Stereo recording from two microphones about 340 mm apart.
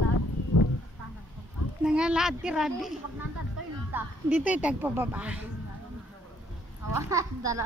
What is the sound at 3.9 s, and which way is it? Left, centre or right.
A woman's voice, centre.